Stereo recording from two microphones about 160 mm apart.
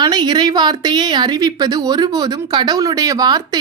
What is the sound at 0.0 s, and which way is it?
A woman's voice, 25° right (ahead or behind).